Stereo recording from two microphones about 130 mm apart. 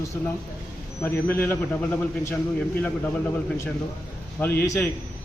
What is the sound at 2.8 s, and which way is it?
A man's voice, 15° left (ahead or behind).